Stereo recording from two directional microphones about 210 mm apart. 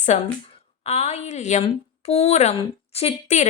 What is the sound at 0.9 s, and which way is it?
A woman's voice, 30° left (ahead or behind).